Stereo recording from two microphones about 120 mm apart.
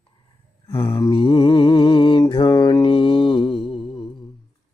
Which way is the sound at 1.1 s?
45° left (ahead or behind).